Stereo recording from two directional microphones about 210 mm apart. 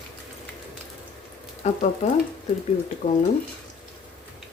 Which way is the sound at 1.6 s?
30° left (ahead or behind).